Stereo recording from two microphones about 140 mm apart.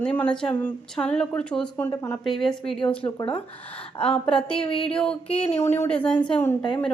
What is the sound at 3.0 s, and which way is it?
Speech, 35° left (ahead or behind).